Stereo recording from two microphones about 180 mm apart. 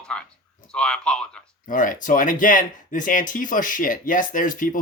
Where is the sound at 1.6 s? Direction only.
45° left (ahead or behind).